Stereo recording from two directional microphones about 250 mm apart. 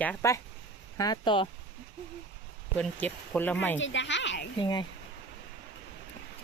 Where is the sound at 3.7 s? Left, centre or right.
Left.